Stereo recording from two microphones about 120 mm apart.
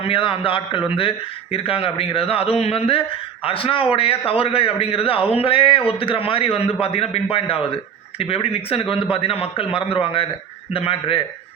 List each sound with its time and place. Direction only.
0.0 s a man's voice: 45° left (ahead or behind)